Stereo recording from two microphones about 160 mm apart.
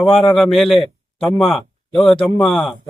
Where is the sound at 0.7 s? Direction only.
35° left (ahead or behind).